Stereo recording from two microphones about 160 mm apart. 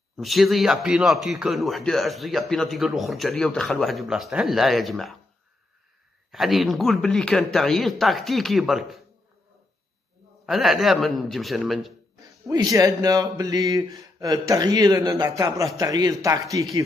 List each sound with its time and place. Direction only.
0.2 s speech: centre (ahead or behind)
6.3 s speech: centre (ahead or behind)
10.4 s speech: centre (ahead or behind)
12.4 s a man's voice: 20° right (ahead or behind)